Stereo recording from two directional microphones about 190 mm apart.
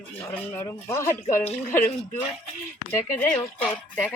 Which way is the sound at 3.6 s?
5° left (ahead or behind).